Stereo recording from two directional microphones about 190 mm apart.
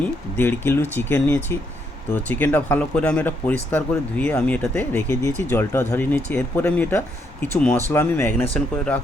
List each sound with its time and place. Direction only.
0.0 s speech: 10° left (ahead or behind)